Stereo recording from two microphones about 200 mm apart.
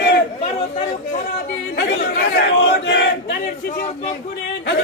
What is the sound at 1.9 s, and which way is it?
Crowd, 55° left (ahead or behind).